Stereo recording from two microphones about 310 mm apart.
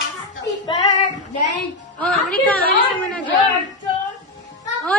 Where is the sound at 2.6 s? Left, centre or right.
Left.